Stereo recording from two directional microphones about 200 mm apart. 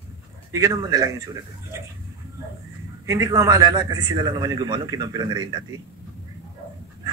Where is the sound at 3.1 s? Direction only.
15° right (ahead or behind).